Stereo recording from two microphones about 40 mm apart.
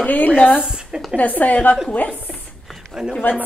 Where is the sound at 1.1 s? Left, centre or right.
Left.